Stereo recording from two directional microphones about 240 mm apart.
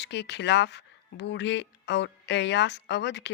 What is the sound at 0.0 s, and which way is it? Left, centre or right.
Speech, left.